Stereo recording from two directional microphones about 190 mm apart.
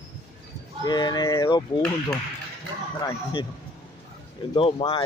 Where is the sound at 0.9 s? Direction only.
20° left (ahead or behind).